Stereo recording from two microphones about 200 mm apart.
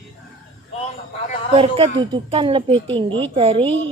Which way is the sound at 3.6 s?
10° left (ahead or behind).